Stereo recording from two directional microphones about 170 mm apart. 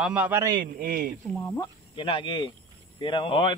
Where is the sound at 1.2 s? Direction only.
10° left (ahead or behind).